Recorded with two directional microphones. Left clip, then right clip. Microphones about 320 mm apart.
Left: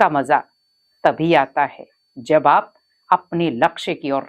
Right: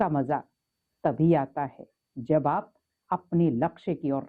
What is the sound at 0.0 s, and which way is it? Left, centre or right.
Speech, centre.